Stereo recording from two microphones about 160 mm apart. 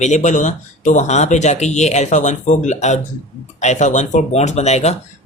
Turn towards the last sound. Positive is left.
turn(degrees=45)  # may be behind; listen again after turning